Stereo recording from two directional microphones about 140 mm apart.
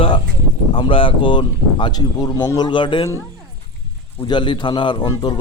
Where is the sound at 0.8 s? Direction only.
40° left (ahead or behind).